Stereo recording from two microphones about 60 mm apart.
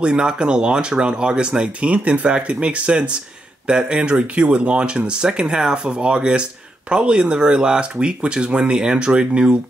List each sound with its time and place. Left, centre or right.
0.0 s speech: centre